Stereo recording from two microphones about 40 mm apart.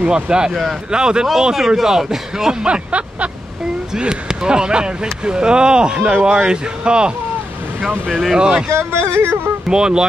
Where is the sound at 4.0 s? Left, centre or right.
Centre.